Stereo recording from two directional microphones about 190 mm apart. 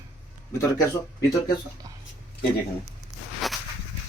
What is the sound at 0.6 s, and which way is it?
Speech, 15° left (ahead or behind).